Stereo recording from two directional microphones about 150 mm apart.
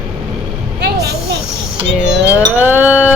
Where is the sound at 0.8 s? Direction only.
90° right.